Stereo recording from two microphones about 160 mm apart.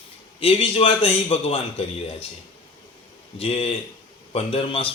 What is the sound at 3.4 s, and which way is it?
A man's voice, 35° left (ahead or behind).